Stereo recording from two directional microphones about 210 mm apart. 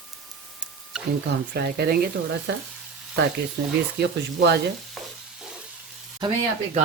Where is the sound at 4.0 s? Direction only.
55° right (ahead or behind).